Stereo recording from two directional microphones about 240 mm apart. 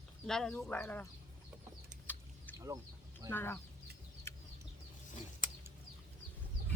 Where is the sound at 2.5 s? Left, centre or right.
Centre.